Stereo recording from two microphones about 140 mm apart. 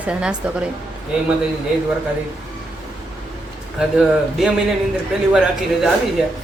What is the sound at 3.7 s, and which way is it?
Speech, 5° right (ahead or behind).